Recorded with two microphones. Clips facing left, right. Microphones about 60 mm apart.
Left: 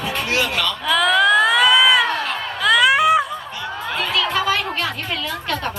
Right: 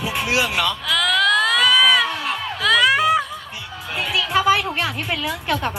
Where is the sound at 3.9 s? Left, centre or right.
Left.